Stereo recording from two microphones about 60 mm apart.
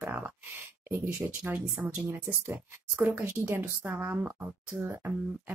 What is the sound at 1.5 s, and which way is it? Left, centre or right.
Speech, right.